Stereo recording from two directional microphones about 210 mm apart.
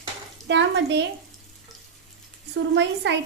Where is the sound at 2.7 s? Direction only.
55° right (ahead or behind).